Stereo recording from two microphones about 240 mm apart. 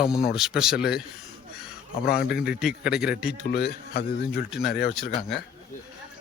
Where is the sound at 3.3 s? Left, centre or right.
Left.